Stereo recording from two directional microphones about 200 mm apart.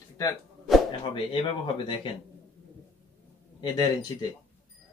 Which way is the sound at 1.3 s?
25° left (ahead or behind).